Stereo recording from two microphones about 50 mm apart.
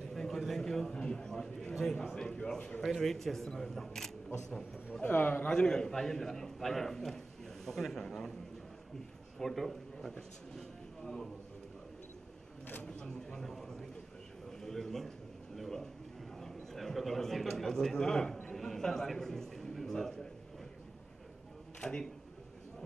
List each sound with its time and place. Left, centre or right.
0.1 s a sound: centre
2.8 s a man's voice: centre
5.0 s a man's voice: left
5.5 s a man's voice: centre
9.4 s a man's voice: centre
10.5 s vehicle: centre
12.8 s a man's voice: centre
14.6 s a sound: centre
16.3 s a man's voice: centre
21.8 s a man's voice: centre